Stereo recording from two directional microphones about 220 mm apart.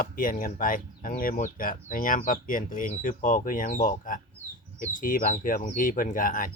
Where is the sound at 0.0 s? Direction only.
40° left (ahead or behind).